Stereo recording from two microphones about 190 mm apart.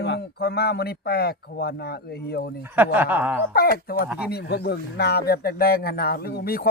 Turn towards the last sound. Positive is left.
turn(degrees=50)  # may be behind; listen again after turning